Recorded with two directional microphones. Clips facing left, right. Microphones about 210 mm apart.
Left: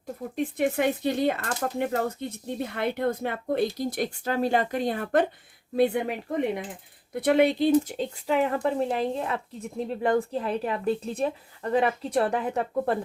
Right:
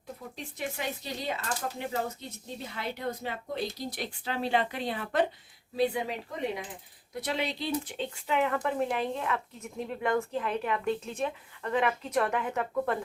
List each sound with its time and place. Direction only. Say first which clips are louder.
0.3 s speech: left 13 dB; 55° left (ahead or behind); by 13.0 s 35° left (ahead or behind)